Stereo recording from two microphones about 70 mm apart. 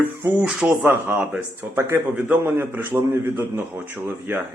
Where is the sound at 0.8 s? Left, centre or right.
Right.